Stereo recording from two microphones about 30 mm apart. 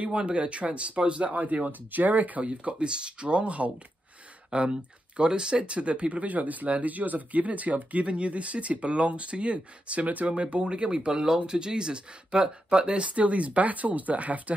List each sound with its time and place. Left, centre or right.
0.2 s speech: right
1.3 s speech: right
2.4 s speech: right
6.2 s speech: right
10.2 s speech: right
13.7 s speech: right